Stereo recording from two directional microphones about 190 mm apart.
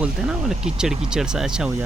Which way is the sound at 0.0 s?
5° right (ahead or behind).